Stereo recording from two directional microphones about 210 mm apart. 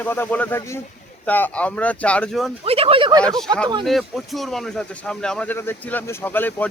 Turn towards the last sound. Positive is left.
turn(degrees=10)  # may be behind; listen again after turning